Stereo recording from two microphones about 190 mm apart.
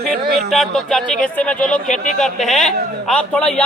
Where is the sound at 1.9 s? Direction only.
40° left (ahead or behind).